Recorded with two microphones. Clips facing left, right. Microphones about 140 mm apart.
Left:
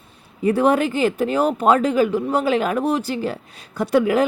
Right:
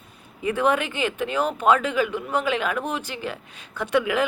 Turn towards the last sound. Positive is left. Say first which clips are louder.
# left 5 dB
turn(degrees=40)  # may be behind; listen again after turning